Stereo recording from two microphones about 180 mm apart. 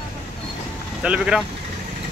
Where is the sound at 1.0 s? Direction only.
5° right (ahead or behind).